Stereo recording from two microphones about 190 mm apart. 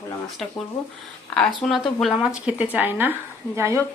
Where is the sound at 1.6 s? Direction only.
Centre (ahead or behind).